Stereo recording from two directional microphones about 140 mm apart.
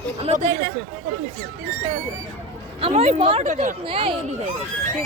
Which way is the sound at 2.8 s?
45° right (ahead or behind).